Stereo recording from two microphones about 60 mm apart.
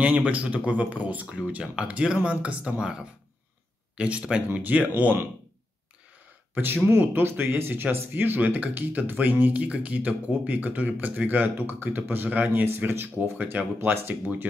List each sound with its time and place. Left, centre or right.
0.0 s speech: right
6.5 s speech: right